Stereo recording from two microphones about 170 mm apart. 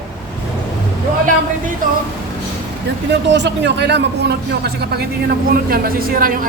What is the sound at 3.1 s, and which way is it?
Speech, 90° right.